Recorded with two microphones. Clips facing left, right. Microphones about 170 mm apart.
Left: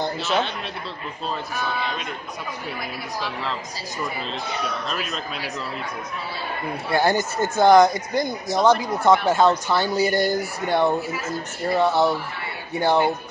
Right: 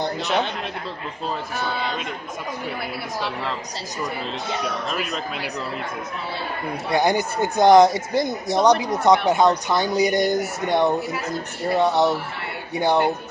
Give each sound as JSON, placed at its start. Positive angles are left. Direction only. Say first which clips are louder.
{"t": 0.0, "sound": "speech", "louder": "right 1 dB", "side_deg": -15}
{"t": 6.9, "sound": "speech", "louder": "right 1 dB", "side_deg": -15}
{"t": 10.9, "sound": "speech", "louder": "right 1 dB", "side_deg": 0}
{"t": 11.8, "sound": "speech", "louder": "right 1 dB", "side_deg": -20}